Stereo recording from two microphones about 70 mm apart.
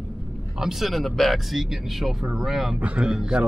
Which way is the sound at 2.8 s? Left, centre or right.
Centre.